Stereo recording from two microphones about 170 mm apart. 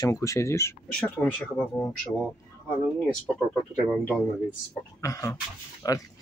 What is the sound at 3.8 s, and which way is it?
Speech, 5° left (ahead or behind).